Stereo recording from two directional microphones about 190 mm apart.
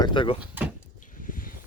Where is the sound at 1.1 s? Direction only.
45° left (ahead or behind).